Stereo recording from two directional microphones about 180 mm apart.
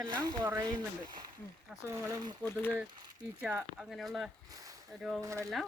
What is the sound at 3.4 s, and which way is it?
Speech, 5° right (ahead or behind).